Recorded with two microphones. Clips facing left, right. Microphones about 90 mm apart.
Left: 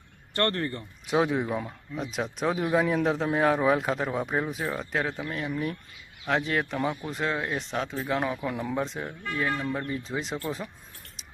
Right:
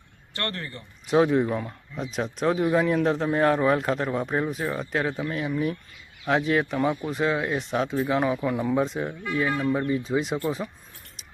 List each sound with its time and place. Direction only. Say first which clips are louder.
0.3 s speech: left 5 dB; 45° left (ahead or behind)
1.0 s a man's voice: right 5 dB; centre (ahead or behind)